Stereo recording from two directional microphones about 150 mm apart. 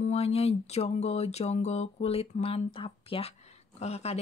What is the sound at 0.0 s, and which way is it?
Speech, 45° left (ahead or behind).